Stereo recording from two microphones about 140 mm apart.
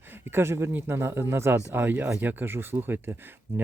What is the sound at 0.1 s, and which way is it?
Speech, 15° right (ahead or behind).